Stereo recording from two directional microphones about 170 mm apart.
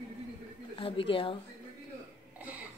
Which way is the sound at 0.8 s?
30° left (ahead or behind).